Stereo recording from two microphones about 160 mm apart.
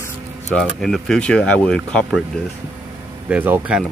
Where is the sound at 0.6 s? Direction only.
Centre (ahead or behind).